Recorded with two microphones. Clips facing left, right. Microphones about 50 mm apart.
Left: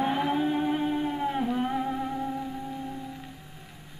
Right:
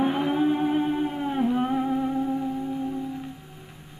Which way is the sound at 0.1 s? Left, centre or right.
Centre.